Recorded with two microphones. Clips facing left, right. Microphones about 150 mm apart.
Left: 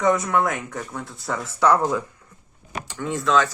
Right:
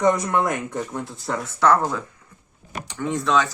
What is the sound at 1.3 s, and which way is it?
Speech, 5° left (ahead or behind).